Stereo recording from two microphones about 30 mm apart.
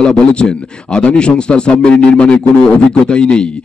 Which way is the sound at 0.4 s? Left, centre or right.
Centre.